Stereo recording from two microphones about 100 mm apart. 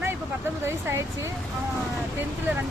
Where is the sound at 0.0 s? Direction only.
25° right (ahead or behind).